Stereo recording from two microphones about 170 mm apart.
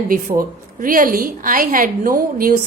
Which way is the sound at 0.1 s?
55° right (ahead or behind).